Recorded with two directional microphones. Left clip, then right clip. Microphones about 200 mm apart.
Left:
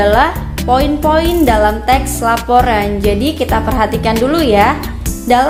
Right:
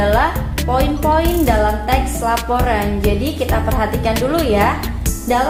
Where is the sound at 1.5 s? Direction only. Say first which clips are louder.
Left 5 dB; 55° left (ahead or behind).